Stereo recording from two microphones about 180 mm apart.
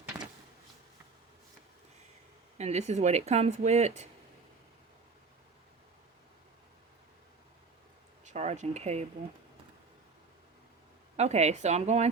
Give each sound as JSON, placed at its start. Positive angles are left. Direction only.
{"t": 2.6, "sound": "speech", "side_deg": -40}
{"t": 8.2, "sound": "speech", "side_deg": -40}
{"t": 11.2, "sound": "speech", "side_deg": -35}